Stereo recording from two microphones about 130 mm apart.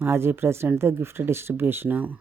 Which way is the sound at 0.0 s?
20° right (ahead or behind).